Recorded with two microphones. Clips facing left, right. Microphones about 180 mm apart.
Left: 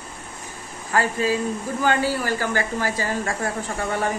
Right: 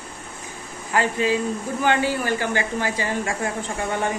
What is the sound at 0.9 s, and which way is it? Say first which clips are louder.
Speech: right 1 dB; 20° right (ahead or behind).